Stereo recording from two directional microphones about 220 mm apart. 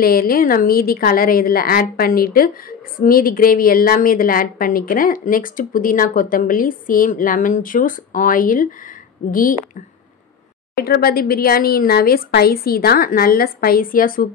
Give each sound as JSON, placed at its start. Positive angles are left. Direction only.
{"t": 0.0, "sound": "a woman's voice", "side_deg": 40}
{"t": 10.8, "sound": "speech", "side_deg": 45}